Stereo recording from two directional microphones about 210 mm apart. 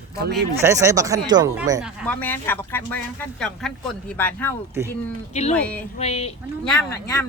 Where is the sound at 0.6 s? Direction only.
15° right (ahead or behind).